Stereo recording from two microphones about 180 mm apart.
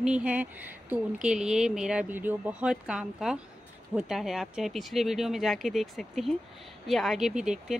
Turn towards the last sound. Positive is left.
turn(degrees=-5)  # may be behind; listen again after turning